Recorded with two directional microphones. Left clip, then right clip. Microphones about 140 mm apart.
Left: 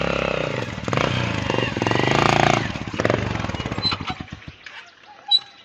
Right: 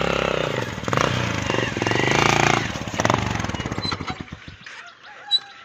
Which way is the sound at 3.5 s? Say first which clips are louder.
Even; 20° right (ahead or behind).